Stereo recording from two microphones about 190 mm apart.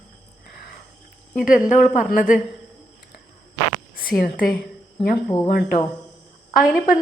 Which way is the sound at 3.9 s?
50° left (ahead or behind).